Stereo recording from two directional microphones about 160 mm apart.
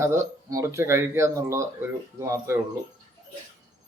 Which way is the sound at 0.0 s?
20° right (ahead or behind).